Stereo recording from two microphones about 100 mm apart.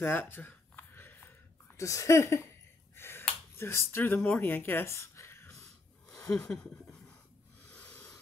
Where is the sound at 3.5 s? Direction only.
25° left (ahead or behind).